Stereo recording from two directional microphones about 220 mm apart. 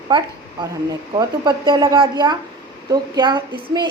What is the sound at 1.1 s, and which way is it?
A woman's voice, 20° right (ahead or behind).